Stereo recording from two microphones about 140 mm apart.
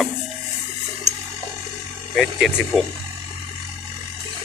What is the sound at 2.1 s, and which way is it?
Speech, centre (ahead or behind).